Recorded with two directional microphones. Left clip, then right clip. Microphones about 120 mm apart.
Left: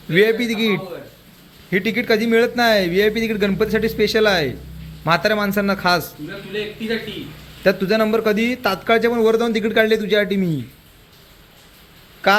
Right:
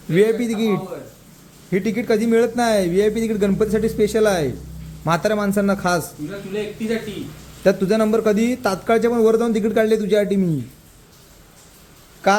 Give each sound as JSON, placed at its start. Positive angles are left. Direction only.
{"t": 0.1, "sound": "a man's voice", "side_deg": -15}
{"t": 7.6, "sound": "a man's voice", "side_deg": -20}